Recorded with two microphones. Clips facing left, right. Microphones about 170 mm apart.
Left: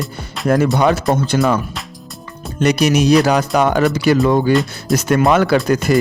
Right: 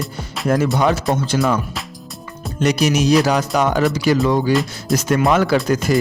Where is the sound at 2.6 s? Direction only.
60° left (ahead or behind).